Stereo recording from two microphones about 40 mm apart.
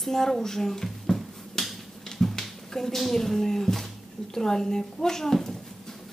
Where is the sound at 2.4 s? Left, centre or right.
Centre.